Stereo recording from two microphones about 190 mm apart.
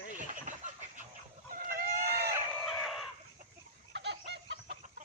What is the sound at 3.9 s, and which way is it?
Chicken, 65° right (ahead or behind).